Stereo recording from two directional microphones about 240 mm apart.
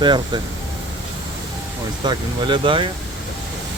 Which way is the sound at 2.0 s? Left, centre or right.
Centre.